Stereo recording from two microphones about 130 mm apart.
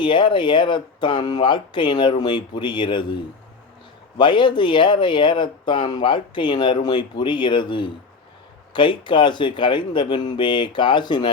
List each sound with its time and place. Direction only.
0.0 s speech: 40° left (ahead or behind)
4.2 s speech: 40° left (ahead or behind)